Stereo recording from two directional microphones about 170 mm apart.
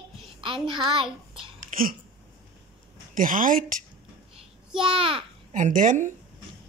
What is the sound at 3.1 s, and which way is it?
Speech, 55° right (ahead or behind).